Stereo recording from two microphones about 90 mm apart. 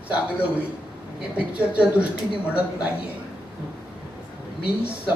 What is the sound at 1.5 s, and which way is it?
Speech, 15° right (ahead or behind).